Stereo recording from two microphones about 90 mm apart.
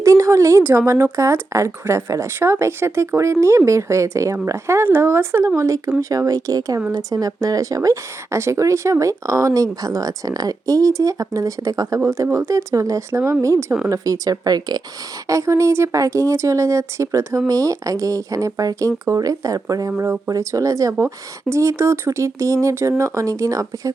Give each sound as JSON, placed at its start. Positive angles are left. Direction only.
{"t": 0.0, "sound": "a woman's voice", "side_deg": -35}
{"t": 15.3, "sound": "a woman's voice", "side_deg": -35}